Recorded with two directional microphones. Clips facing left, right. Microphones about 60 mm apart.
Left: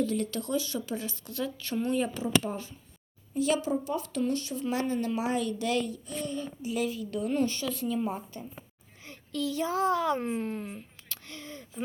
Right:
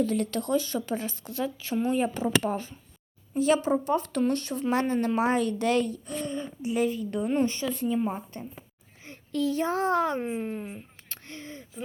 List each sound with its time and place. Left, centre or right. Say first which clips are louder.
0.0 s speech: right 3 dB; right
1.5 s speech: right 2 dB; centre
2.1 s a woman's voice: right 3 dB; right
10.2 s speech: right 1 dB; centre
11.1 s a sound: right 2 dB; right